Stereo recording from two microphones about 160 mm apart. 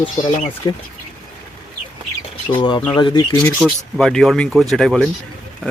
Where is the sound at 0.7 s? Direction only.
25° left (ahead or behind).